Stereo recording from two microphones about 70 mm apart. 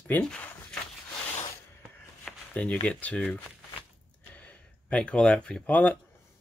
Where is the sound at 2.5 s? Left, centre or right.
Centre.